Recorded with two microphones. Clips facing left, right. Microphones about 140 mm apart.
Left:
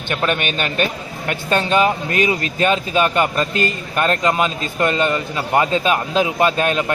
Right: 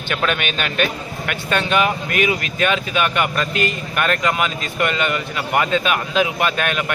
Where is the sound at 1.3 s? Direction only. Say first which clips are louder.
Left 2 dB; 35° left (ahead or behind).